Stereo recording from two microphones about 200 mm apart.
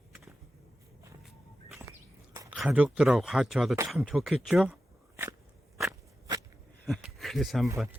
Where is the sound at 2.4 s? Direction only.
5° right (ahead or behind).